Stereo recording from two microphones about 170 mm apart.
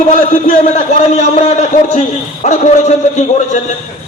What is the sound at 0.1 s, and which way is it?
A man's voice, 45° left (ahead or behind).